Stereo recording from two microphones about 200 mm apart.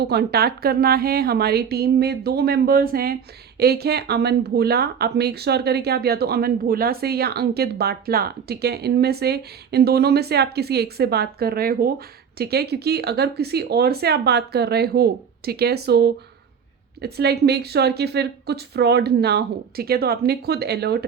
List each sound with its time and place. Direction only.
0.0 s speech: 55° right (ahead or behind)